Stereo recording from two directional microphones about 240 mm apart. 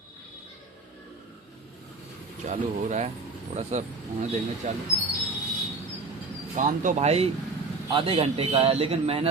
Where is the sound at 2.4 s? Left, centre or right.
Right.